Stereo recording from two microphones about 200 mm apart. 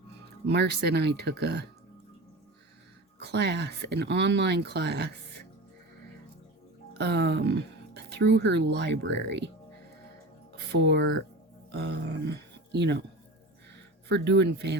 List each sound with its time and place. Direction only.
0.4 s speech: 55° right (ahead or behind)
3.2 s speech: 55° right (ahead or behind)
6.9 s speech: 55° right (ahead or behind)
10.8 s speech: 60° right (ahead or behind)
14.1 s speech: 60° right (ahead or behind)